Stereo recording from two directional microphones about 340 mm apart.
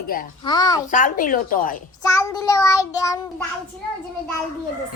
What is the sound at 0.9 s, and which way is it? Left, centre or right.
Speech, left.